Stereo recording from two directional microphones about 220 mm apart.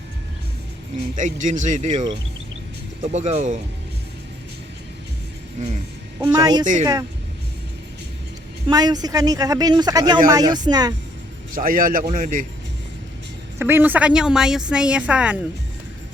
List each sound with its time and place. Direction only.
1.1 s speech: 35° right (ahead or behind)
6.1 s speech: 15° right (ahead or behind)
8.7 s speech: 15° right (ahead or behind)
11.5 s speech: 40° right (ahead or behind)
13.6 s a woman's voice: 10° right (ahead or behind)